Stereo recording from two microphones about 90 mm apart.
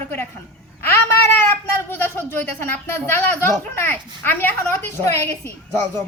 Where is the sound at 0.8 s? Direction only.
25° left (ahead or behind).